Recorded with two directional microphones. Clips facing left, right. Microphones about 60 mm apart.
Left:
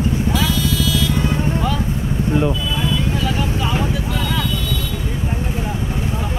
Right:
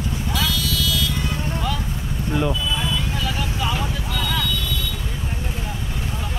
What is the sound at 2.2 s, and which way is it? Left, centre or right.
Speech, centre.